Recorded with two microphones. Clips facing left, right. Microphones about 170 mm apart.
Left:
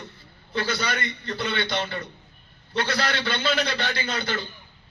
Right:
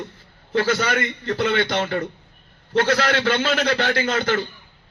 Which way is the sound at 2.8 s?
90° right.